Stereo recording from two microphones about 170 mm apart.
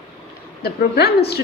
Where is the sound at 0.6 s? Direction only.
70° left (ahead or behind).